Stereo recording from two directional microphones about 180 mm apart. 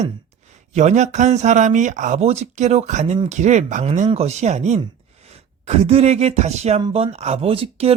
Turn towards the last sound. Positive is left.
turn(degrees=-30)  # may be behind; listen again after turning